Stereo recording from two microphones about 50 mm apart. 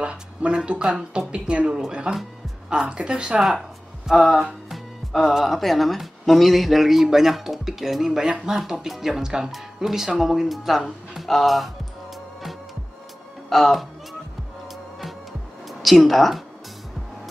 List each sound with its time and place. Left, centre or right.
0.0 s a woman's voice: right
4.2 s speech: centre
4.6 s music: centre
5.3 s speech: centre
13.5 s speech: centre
15.8 s speech: centre